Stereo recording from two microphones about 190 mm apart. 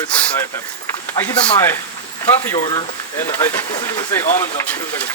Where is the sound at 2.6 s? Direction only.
20° left (ahead or behind).